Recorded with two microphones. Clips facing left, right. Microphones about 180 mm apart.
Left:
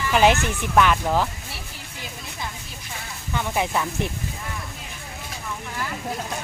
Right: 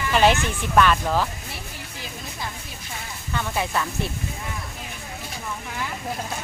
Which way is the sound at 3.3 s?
15° left (ahead or behind).